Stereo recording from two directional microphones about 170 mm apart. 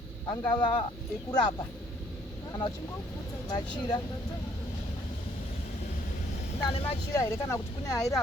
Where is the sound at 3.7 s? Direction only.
30° left (ahead or behind).